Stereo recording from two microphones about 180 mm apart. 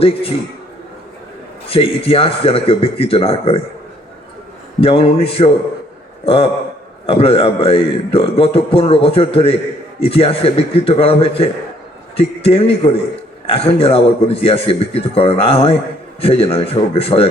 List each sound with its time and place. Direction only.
0.0 s a man's voice: 30° left (ahead or behind)
1.6 s a man's voice: 30° left (ahead or behind)
4.8 s a man's voice: 30° left (ahead or behind)